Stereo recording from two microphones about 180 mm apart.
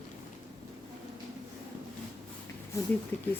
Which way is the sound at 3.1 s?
10° left (ahead or behind).